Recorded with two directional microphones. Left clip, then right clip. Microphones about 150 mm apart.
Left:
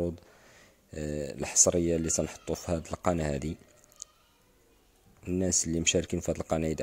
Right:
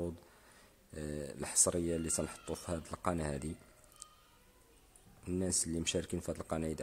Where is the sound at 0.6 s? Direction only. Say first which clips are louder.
Left 7 dB; 30° left (ahead or behind).